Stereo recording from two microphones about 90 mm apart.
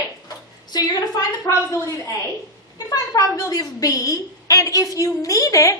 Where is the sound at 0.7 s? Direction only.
50° left (ahead or behind).